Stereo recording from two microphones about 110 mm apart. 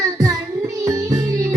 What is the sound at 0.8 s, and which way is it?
Music, 30° right (ahead or behind).